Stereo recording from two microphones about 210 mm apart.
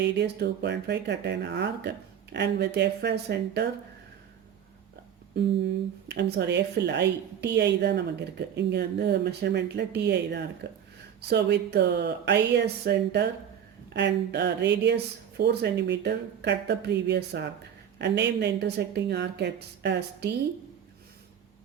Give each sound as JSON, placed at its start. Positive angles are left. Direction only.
{"t": 0.0, "sound": "speech", "side_deg": -55}
{"t": 5.4, "sound": "speech", "side_deg": -55}